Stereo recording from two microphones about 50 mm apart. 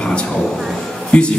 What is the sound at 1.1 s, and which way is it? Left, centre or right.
Speech, left.